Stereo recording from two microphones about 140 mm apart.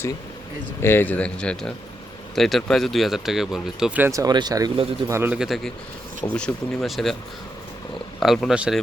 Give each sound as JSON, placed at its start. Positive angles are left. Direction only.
{"t": 0.8, "sound": "speech", "side_deg": 15}
{"t": 4.1, "sound": "speech", "side_deg": -25}
{"t": 5.0, "sound": "speech", "side_deg": -20}
{"t": 5.4, "sound": "speech", "side_deg": 0}
{"t": 8.2, "sound": "speech", "side_deg": 0}